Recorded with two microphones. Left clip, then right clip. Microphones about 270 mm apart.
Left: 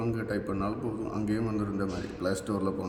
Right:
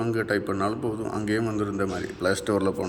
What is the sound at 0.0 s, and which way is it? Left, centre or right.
A man's voice, centre.